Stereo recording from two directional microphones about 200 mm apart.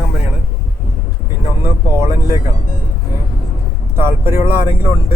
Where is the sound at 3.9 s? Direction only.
10° right (ahead or behind).